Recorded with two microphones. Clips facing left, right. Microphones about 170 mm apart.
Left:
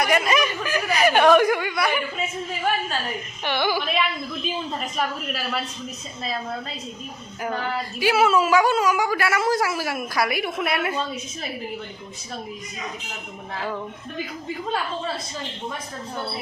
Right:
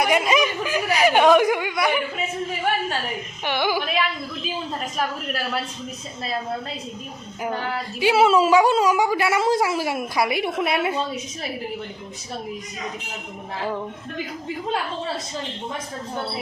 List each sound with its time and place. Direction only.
0.0 s speech: 20° right (ahead or behind)
3.4 s speech: 15° right (ahead or behind)
7.4 s speech: 10° right (ahead or behind)